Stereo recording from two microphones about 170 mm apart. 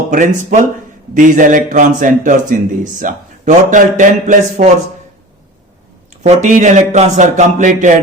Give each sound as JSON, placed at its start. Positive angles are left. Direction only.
{"t": 0.1, "sound": "a man's voice", "side_deg": -50}
{"t": 6.2, "sound": "a man's voice", "side_deg": -45}